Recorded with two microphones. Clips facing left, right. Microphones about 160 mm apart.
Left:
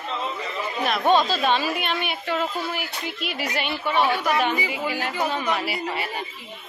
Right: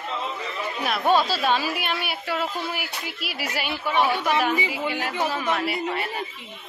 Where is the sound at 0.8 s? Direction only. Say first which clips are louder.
Left 1 dB; 5° right (ahead or behind).